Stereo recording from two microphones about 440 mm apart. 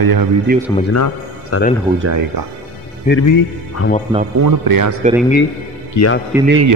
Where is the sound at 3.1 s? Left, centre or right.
Centre.